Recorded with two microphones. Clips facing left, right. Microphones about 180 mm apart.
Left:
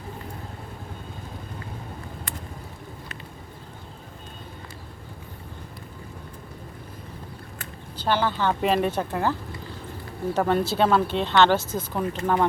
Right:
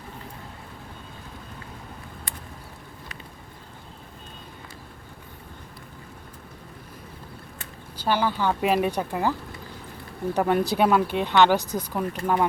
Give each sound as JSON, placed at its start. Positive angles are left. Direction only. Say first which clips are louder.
{"t": 7.9, "sound": "speech", "louder": "even", "side_deg": -10}
{"t": 10.3, "sound": "speech", "louder": "even", "side_deg": -15}